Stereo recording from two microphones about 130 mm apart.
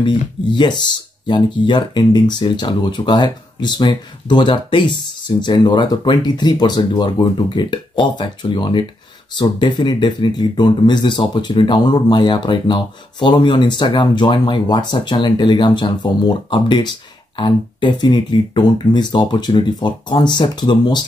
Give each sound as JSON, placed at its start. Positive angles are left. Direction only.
{"t": 0.0, "sound": "speech", "side_deg": 35}